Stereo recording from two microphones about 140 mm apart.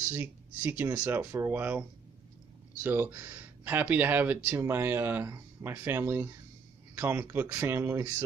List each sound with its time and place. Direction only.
0.1 s speech: 15° right (ahead or behind)